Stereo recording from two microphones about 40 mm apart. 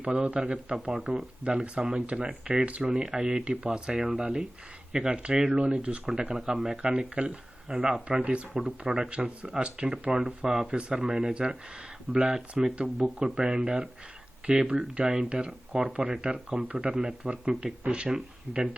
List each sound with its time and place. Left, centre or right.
0.0 s a man's voice: right
6.8 s speech: right
8.2 s speech: right; by 10.7 s centre
10.7 s speech: right